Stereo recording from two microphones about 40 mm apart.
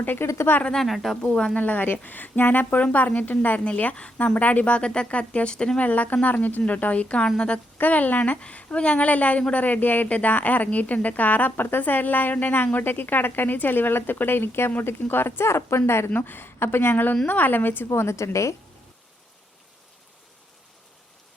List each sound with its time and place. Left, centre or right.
0.2 s speech: left
0.9 s speech: centre
1.2 s a woman's voice: centre
1.5 s a woman's voice: left
4.4 s a woman's voice: left
5.8 s a woman's voice: left
7.8 s speech: left
8.4 s a woman's voice: left
16.1 s speech: left